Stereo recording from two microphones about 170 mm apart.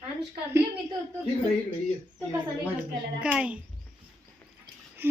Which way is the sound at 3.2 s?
5° right (ahead or behind).